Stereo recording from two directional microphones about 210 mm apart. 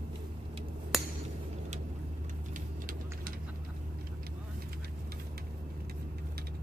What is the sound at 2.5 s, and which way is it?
Vehicle, 40° right (ahead or behind).